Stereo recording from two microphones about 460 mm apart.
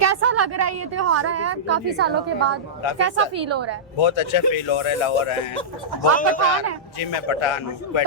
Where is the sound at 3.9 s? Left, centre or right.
Left.